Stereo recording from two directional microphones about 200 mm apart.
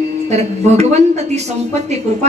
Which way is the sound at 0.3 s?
35° right (ahead or behind).